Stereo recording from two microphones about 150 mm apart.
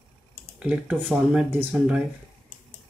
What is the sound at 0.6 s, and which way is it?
Speech, 10° right (ahead or behind).